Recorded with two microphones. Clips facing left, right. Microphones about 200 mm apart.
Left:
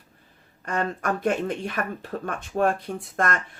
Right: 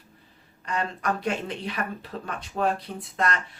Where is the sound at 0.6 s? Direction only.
50° left (ahead or behind).